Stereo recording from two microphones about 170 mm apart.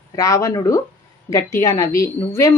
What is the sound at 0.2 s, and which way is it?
A woman's voice, 20° left (ahead or behind).